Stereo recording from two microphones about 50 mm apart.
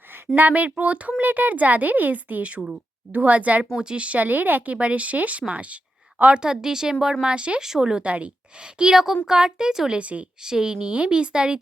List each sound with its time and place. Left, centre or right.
0.3 s speech: right
6.4 s a woman's voice: centre
10.0 s speech: right
10.4 s a woman's voice: centre